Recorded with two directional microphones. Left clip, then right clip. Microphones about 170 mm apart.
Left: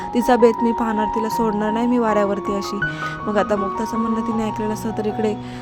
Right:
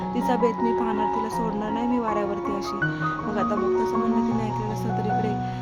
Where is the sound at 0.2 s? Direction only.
35° left (ahead or behind).